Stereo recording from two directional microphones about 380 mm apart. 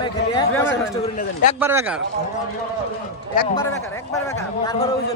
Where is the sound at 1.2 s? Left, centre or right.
Left.